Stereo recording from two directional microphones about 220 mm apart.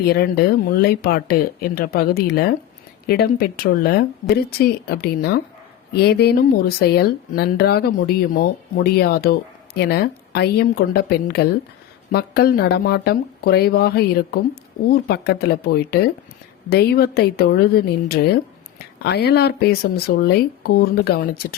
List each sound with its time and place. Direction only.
0.0 s speech: 45° left (ahead or behind)